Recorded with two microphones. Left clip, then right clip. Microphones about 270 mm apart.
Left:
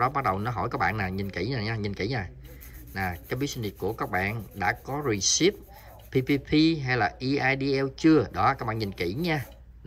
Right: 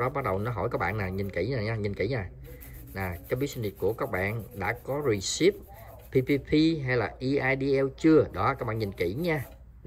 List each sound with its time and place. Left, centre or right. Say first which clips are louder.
0.0 s speech: left 3 dB; centre